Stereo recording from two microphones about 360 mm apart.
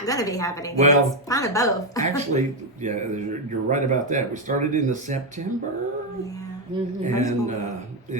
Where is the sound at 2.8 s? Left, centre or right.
Centre.